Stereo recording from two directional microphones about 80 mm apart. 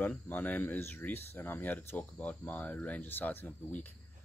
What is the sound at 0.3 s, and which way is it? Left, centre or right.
Speech, left.